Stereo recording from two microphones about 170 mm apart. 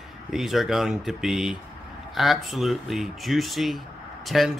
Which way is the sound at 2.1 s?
Centre (ahead or behind).